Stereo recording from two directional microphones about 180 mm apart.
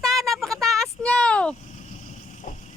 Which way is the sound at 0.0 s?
Centre (ahead or behind).